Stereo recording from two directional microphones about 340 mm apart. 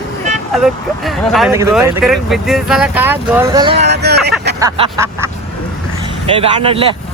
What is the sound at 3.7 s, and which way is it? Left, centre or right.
Speech, right.